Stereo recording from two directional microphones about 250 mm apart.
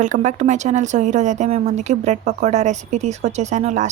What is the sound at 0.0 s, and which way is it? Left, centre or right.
Speech, right.